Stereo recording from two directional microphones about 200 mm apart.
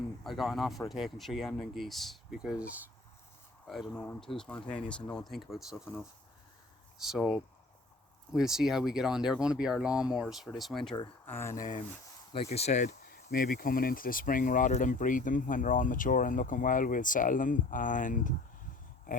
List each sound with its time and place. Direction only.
0.3 s speech: centre (ahead or behind)
7.0 s speech: centre (ahead or behind)
11.3 s speech: 10° left (ahead or behind)
11.5 s speech: 40° left (ahead or behind)